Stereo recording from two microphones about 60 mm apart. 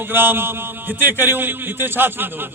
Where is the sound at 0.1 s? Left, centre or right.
Right.